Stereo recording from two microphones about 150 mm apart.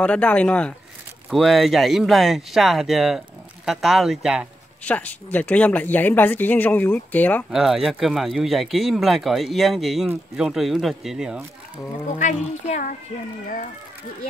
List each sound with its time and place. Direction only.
0.0 s speech: 10° left (ahead or behind)
4.8 s speech: 10° left (ahead or behind)
7.5 s speech: centre (ahead or behind)
12.2 s speech: 55° left (ahead or behind)